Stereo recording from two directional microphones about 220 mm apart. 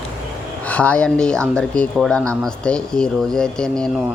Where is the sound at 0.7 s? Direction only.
5° left (ahead or behind).